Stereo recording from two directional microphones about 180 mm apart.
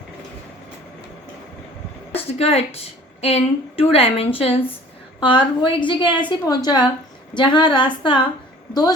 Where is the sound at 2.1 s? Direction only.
35° left (ahead or behind).